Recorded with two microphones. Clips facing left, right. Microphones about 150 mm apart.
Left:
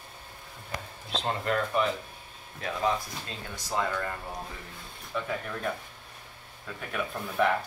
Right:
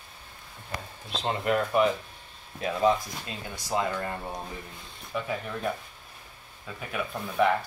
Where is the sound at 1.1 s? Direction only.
10° right (ahead or behind).